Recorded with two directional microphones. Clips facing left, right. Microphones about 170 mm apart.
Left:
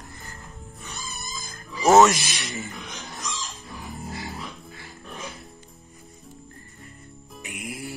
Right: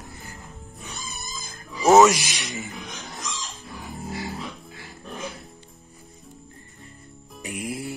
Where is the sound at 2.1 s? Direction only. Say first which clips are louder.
Right 1 dB; 15° right (ahead or behind).